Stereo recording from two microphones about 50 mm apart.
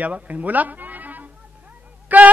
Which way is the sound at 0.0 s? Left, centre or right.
Right.